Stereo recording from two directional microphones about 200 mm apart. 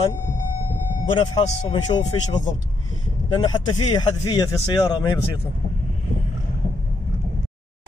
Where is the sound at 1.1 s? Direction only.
25° left (ahead or behind).